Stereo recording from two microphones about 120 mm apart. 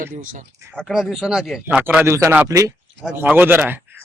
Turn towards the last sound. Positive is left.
turn(degrees=-15)  # may be behind; listen again after turning